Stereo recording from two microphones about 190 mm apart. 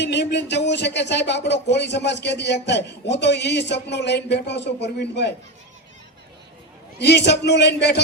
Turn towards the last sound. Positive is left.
turn(degrees=65)  # may be behind; listen again after turning